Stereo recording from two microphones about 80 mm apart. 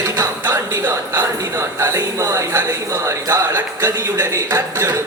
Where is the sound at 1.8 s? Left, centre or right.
Right.